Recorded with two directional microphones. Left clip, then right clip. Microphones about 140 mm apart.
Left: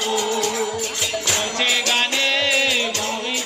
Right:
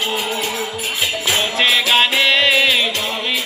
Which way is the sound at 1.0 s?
40° left (ahead or behind).